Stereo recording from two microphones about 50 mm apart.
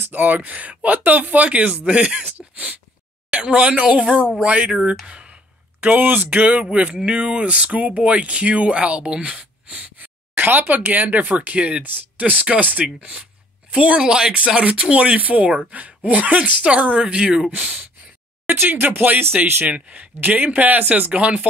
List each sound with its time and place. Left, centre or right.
0.0 s speech: right
3.3 s speech: centre
5.0 s a sound: right
5.8 s speech: right
9.9 s speech: right
18.5 s speech: right
19.6 s speech: right
21.1 s speech: right